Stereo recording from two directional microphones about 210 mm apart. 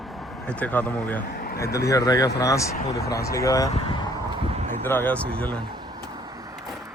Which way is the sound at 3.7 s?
25° left (ahead or behind).